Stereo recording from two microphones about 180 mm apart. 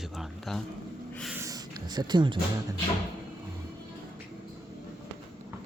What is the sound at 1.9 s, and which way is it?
Speech, 25° right (ahead or behind).